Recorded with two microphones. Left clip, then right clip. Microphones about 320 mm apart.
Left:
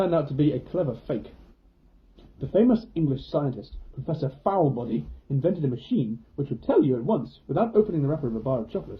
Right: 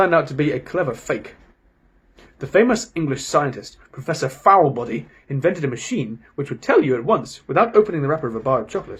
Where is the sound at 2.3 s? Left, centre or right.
Centre.